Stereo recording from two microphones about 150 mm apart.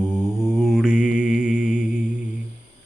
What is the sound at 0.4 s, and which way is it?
Mantra, 5° right (ahead or behind).